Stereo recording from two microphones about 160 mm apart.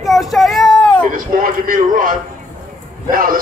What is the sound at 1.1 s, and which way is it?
A man's voice, 60° right (ahead or behind).